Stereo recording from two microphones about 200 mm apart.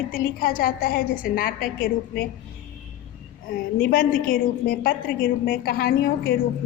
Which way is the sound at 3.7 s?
45° left (ahead or behind).